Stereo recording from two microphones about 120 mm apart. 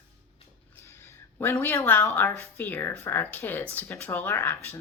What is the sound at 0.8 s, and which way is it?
A woman's voice, 20° left (ahead or behind).